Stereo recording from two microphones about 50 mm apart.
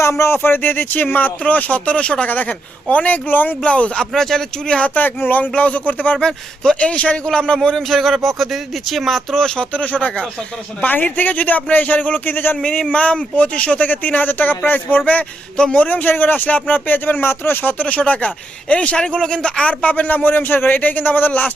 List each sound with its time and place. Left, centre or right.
0.0 s speech: left
2.2 s speech: left
3.2 s speech: left
3.6 s speech: left
4.1 s speech: centre
4.9 s speech: left
5.5 s speech: left
6.1 s speech: centre
7.8 s speech: centre
9.3 s speech: centre
9.7 s speech: left
12.9 s speech: left
13.8 s speech: left; by 19.7 s centre
19.8 s speech: left